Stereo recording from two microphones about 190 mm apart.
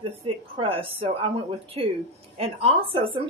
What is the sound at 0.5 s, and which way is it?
A woman's voice, 30° right (ahead or behind).